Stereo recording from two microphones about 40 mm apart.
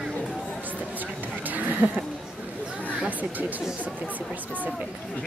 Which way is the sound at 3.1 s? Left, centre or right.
Right.